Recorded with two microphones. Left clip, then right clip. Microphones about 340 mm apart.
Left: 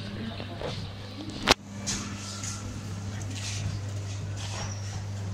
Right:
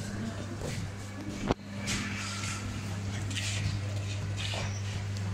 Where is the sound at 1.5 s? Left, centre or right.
Left.